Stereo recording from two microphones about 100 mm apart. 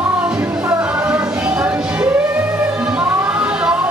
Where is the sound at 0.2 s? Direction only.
15° right (ahead or behind).